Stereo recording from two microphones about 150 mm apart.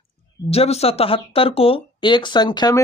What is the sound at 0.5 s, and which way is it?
Speech, 45° left (ahead or behind).